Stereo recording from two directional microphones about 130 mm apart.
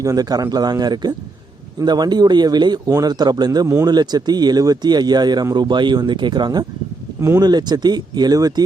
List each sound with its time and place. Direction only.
0.0 s speech: 30° right (ahead or behind)